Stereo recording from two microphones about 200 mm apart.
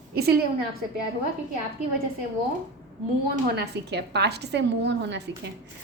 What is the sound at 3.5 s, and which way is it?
A woman's voice, 55° right (ahead or behind).